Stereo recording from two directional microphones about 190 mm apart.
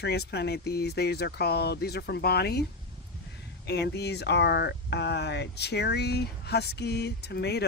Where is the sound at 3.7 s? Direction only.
60° left (ahead or behind).